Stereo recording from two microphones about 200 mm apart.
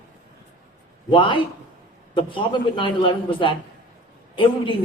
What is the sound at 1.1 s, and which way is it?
Speech, 25° left (ahead or behind).